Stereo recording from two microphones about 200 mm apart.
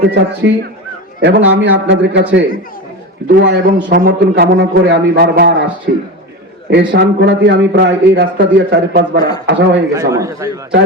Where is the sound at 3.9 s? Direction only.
45° right (ahead or behind).